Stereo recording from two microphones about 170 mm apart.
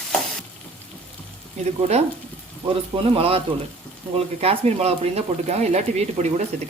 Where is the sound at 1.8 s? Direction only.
40° right (ahead or behind).